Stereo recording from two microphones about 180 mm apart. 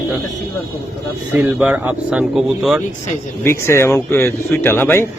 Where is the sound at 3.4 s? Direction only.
15° left (ahead or behind).